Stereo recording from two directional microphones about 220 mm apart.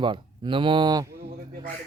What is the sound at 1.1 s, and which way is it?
Speech, 45° right (ahead or behind).